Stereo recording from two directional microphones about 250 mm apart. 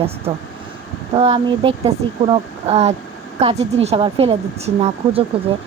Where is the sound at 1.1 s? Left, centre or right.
Right.